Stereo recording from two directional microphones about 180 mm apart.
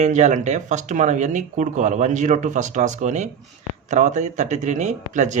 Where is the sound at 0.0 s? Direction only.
40° right (ahead or behind).